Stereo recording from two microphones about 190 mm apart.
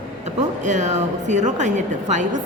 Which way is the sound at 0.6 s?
40° right (ahead or behind).